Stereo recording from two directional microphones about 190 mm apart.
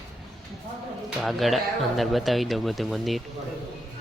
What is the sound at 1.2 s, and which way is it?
Speech, centre (ahead or behind).